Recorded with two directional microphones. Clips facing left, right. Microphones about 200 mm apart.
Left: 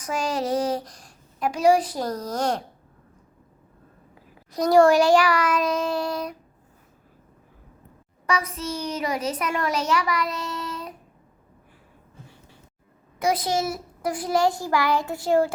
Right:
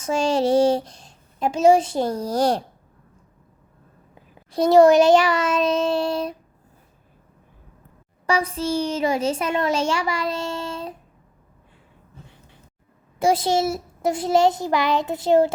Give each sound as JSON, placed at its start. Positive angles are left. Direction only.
{"t": 0.0, "sound": "a child's voice", "side_deg": -25}
{"t": 4.4, "sound": "a child's voice", "side_deg": -25}
{"t": 8.3, "sound": "a child's voice", "side_deg": -30}
{"t": 13.1, "sound": "a child's voice", "side_deg": -30}